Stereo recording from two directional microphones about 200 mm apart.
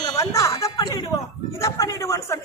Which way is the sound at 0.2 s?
15° left (ahead or behind).